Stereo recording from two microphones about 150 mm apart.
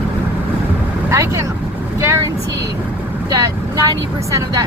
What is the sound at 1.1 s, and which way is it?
Speech, 20° right (ahead or behind).